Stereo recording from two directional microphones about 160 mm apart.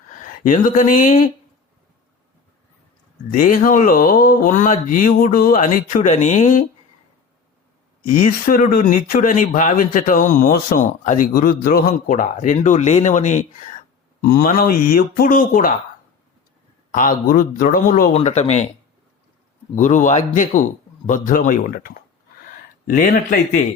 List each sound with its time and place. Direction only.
0.2 s speech: 55° left (ahead or behind)
3.3 s speech: 55° left (ahead or behind)
8.1 s speech: 60° left (ahead or behind)
14.2 s speech: 60° left (ahead or behind)
16.9 s speech: 60° left (ahead or behind)
18.1 s a man's voice: 45° left (ahead or behind)
19.7 s a man's voice: 50° left (ahead or behind)